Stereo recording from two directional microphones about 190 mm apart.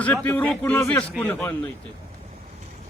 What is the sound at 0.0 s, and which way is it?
A man's voice, 10° left (ahead or behind).